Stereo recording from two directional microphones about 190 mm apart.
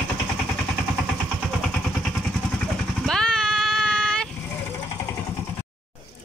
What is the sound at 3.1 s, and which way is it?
Vehicle, 5° left (ahead or behind).